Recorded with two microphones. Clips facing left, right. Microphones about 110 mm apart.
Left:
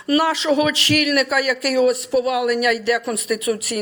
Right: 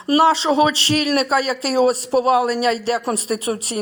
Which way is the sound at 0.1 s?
30° right (ahead or behind).